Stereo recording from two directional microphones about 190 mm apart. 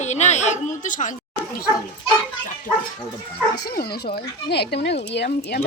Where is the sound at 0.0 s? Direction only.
35° left (ahead or behind).